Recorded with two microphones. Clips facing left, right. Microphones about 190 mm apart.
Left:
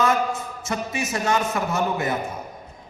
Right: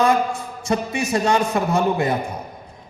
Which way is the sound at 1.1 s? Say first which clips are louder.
Right 5 dB; 30° right (ahead or behind).